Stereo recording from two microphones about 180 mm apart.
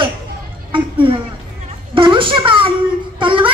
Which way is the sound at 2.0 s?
30° right (ahead or behind).